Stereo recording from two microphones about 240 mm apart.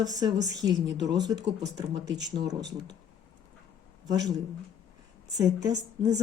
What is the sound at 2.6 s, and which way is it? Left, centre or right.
Speech, right.